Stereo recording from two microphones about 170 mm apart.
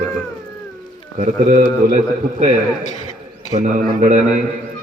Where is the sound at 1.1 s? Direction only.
45° right (ahead or behind).